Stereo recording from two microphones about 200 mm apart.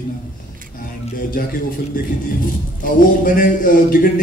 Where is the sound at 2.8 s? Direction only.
40° left (ahead or behind).